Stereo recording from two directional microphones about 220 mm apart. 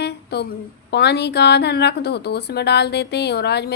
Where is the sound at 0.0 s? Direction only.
50° left (ahead or behind).